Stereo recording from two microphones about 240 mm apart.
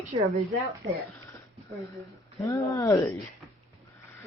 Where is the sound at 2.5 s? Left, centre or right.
Centre.